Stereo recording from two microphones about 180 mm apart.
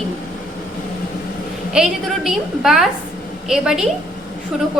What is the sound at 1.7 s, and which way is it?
A woman's voice, 5° right (ahead or behind).